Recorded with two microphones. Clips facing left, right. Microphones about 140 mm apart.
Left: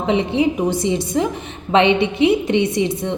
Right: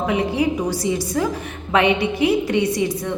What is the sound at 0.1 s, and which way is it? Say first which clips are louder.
A woman's voice: left 6 dB; 25° left (ahead or behind).